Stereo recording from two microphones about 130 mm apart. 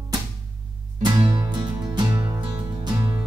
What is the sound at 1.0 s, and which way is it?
Music, 35° right (ahead or behind).